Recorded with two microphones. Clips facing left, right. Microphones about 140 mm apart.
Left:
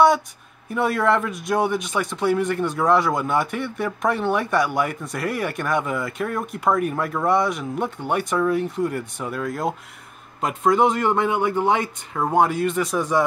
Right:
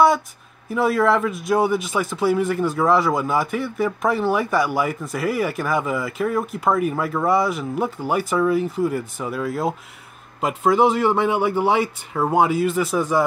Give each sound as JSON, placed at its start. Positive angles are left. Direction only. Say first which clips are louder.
{"t": 0.7, "sound": "speech", "louder": "right 2 dB", "side_deg": 0}